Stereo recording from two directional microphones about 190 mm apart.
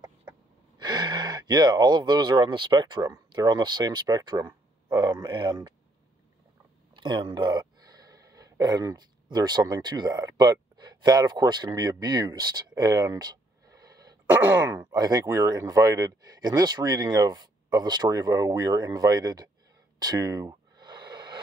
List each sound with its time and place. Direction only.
0.7 s speech: 20° right (ahead or behind)
7.0 s speech: 25° right (ahead or behind)
14.3 s throat clearing: 10° right (ahead or behind)
14.8 s speech: 20° right (ahead or behind)
20.0 s a sound: 20° right (ahead or behind)